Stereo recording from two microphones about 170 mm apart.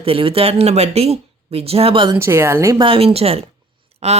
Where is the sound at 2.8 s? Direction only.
35° right (ahead or behind).